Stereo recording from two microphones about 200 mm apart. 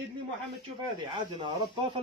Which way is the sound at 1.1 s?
25° right (ahead or behind).